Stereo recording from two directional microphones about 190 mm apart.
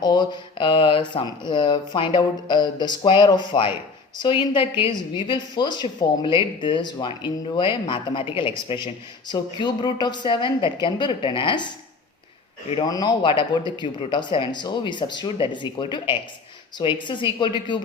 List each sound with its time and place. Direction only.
0.0 s speech: 20° left (ahead or behind)
12.7 s speech: 20° left (ahead or behind)